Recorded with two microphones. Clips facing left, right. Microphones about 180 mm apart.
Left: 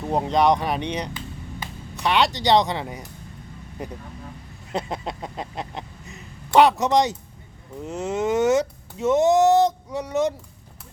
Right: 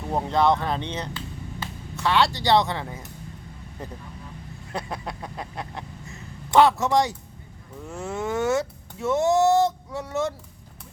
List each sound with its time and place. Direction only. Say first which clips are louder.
0.1 s speech: left 2 dB; 15° left (ahead or behind)
4.7 s a sound: left 4 dB; 20° left (ahead or behind)
7.8 s speech: left 5 dB; 20° left (ahead or behind)